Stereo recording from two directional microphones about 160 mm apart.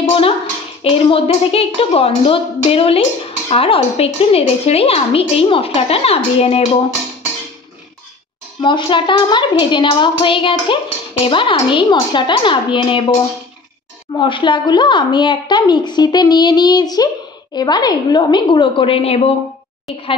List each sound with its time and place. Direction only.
0.8 s a woman's voice: 35° left (ahead or behind)
8.6 s a woman's voice: 30° left (ahead or behind)
14.1 s a woman's voice: 30° left (ahead or behind)